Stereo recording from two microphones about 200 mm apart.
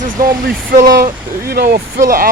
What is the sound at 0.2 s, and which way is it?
Speech, 45° right (ahead or behind).